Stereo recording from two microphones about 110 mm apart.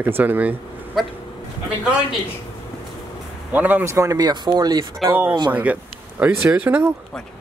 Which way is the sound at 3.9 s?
35° right (ahead or behind).